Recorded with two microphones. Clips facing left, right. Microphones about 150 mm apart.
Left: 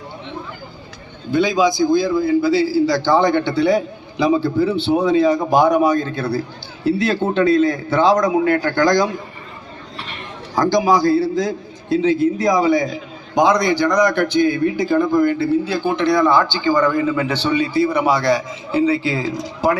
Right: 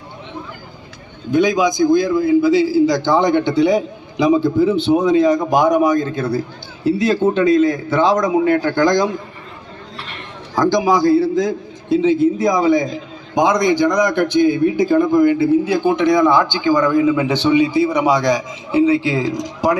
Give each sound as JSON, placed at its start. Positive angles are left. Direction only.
{"t": 1.3, "sound": "a man's voice", "side_deg": -15}
{"t": 10.6, "sound": "a man's voice", "side_deg": -20}
{"t": 12.5, "sound": "a man's voice", "side_deg": 5}
{"t": 12.7, "sound": "a man's voice", "side_deg": -20}